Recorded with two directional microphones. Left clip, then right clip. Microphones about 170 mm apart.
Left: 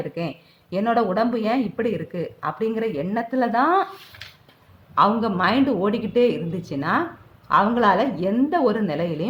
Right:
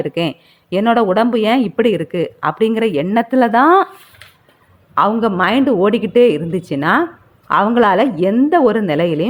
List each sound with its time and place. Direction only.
0.1 s speech: 55° right (ahead or behind)
4.9 s speech: 40° right (ahead or behind)